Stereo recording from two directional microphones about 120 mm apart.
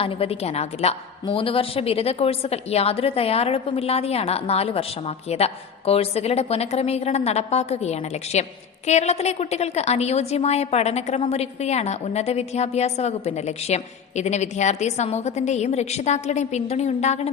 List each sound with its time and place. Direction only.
0.0 s a woman's voice: 50° left (ahead or behind)